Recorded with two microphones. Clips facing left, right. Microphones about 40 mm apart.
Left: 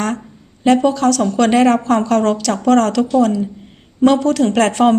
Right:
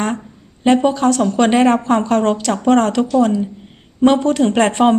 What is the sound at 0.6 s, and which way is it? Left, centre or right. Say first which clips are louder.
Speech: even; right.